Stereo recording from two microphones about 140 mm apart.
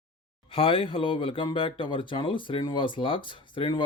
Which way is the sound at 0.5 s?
40° left (ahead or behind).